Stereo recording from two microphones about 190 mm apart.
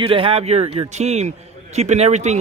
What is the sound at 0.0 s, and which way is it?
Speech, 30° right (ahead or behind).